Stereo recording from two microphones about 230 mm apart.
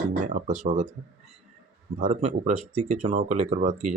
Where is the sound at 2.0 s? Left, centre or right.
Right.